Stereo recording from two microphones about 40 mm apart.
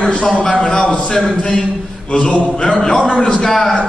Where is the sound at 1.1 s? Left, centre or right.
Centre.